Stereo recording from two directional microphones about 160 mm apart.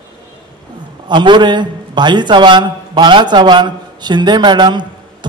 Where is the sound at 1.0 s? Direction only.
30° right (ahead or behind).